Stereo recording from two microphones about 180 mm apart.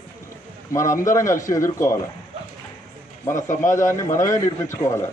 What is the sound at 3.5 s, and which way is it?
Speech, 45° left (ahead or behind).